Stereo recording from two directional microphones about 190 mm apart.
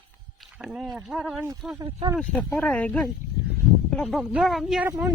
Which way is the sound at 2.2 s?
5° left (ahead or behind).